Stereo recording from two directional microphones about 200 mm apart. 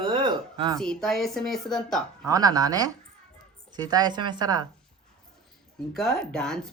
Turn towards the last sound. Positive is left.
turn(degrees=5)  # may be behind; listen again after turning